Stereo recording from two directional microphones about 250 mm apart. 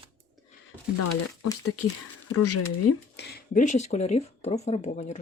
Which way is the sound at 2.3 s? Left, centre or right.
Left.